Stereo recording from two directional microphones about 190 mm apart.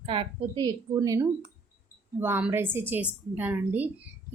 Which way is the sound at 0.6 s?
15° right (ahead or behind).